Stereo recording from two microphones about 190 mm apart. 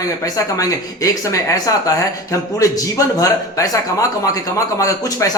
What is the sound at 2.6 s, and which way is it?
Speech, 15° left (ahead or behind).